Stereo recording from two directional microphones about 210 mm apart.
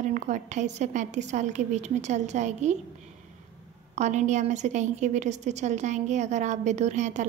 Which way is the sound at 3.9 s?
35° right (ahead or behind).